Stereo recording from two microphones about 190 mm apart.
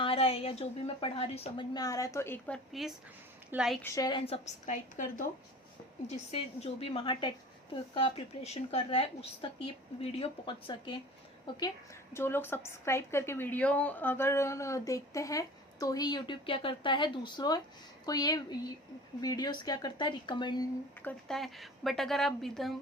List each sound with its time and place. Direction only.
0.0 s a woman's voice: 30° left (ahead or behind); by 2.6 s 10° left (ahead or behind)
3.5 s a woman's voice: 5° right (ahead or behind)
3.8 s a woman's voice: 20° left (ahead or behind)
12.1 s a woman's voice: 10° left (ahead or behind)
21.0 s a woman's voice: 5° left (ahead or behind)